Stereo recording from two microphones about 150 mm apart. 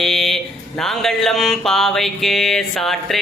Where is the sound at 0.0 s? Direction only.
Centre (ahead or behind).